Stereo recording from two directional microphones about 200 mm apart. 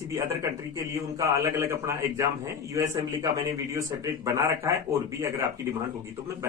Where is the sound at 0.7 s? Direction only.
15° right (ahead or behind).